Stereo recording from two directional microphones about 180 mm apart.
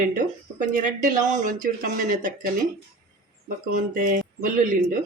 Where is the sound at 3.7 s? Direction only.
50° right (ahead or behind).